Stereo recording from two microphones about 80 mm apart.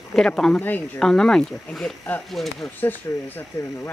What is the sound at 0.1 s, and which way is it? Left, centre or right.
Speech, centre.